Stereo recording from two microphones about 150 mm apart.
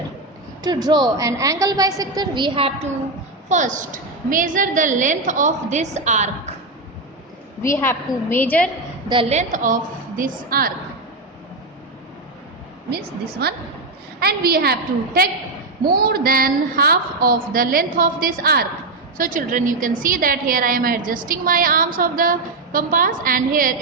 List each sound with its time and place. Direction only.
0.6 s a woman's voice: 25° right (ahead or behind)
3.5 s a woman's voice: 55° right (ahead or behind)
7.6 s a woman's voice: 15° left (ahead or behind)
9.3 s a woman's voice: 55° right (ahead or behind)
12.9 s a woman's voice: 90° right
19.1 s a woman's voice: 65° right (ahead or behind)